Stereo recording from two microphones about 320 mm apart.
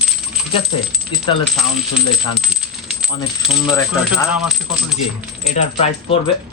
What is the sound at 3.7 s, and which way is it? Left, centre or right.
Speech, centre.